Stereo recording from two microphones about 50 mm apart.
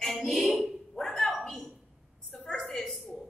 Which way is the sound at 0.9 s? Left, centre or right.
Centre.